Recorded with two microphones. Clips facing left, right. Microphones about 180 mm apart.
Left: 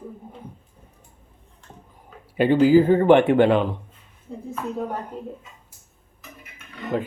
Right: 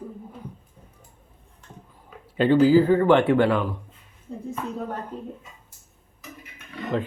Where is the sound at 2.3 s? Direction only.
15° left (ahead or behind).